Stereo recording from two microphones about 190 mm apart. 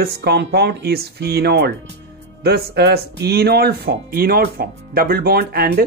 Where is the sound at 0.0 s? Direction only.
60° right (ahead or behind).